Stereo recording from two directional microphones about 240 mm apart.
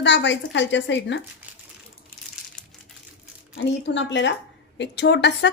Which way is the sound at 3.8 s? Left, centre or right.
Left.